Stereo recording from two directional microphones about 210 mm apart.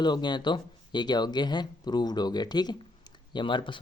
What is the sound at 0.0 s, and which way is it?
Speech, 20° left (ahead or behind).